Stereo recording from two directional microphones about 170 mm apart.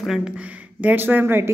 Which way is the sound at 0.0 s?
5° right (ahead or behind).